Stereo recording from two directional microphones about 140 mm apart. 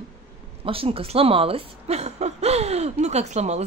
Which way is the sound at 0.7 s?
40° right (ahead or behind).